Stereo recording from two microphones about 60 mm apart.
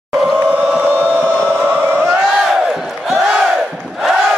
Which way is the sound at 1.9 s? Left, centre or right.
Right.